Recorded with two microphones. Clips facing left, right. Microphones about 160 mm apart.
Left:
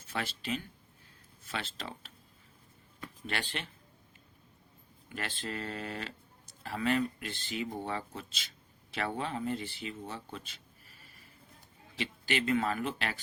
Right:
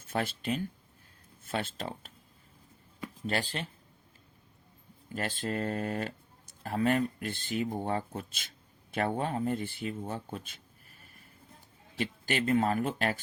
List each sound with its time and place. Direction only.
0.0 s speech: 50° right (ahead or behind)
3.2 s speech: 35° right (ahead or behind)
5.0 s speech: 40° right (ahead or behind)